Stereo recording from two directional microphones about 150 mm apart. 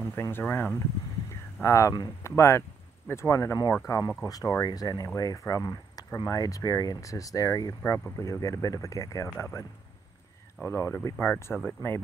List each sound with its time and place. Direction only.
0.0 s speech: 15° left (ahead or behind)